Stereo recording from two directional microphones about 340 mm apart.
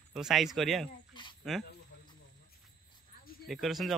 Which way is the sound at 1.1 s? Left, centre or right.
Centre.